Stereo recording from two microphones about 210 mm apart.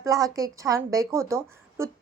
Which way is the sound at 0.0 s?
15° right (ahead or behind).